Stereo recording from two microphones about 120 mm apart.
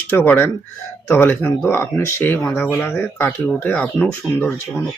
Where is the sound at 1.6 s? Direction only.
20° left (ahead or behind).